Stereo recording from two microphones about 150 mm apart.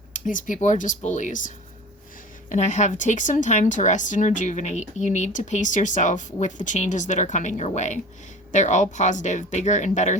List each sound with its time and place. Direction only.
0.1 s speech: 60° left (ahead or behind)